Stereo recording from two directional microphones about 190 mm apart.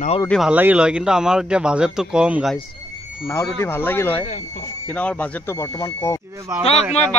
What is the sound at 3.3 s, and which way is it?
Speech, 15° left (ahead or behind).